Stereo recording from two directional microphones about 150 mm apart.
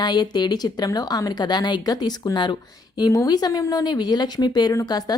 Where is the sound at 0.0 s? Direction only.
30° left (ahead or behind).